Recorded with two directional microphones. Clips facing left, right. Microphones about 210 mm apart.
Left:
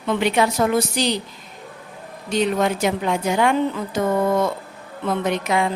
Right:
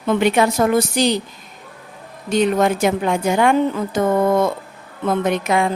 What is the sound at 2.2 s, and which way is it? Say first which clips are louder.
A woman's voice: right 4 dB; 50° right (ahead or behind).